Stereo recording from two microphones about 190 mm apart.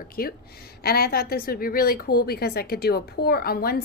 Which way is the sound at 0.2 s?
50° left (ahead or behind).